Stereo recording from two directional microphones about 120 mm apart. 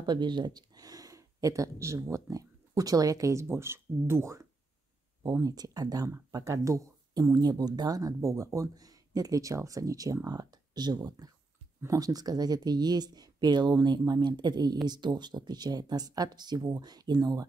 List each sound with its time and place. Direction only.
0.0 s speech: 40° right (ahead or behind)